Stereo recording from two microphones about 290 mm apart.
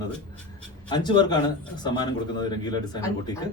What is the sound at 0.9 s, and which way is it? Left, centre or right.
A man's voice, centre.